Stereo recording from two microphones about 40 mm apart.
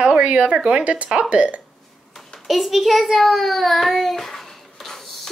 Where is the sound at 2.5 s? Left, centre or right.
Centre.